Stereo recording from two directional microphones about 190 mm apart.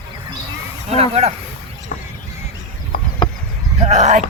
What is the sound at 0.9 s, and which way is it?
Speech, 35° right (ahead or behind).